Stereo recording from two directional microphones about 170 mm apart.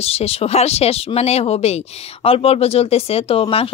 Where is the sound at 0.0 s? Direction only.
35° left (ahead or behind).